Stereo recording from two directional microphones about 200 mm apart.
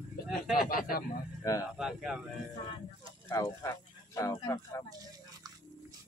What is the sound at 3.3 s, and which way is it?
Speech, 15° left (ahead or behind).